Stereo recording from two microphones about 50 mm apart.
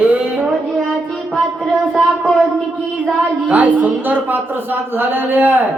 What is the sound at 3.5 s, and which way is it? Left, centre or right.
Speech, right.